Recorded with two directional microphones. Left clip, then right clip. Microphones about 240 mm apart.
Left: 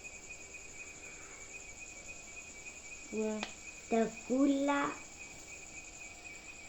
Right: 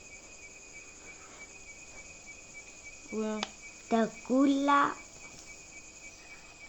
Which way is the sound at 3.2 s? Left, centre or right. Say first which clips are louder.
Right 3 dB; right.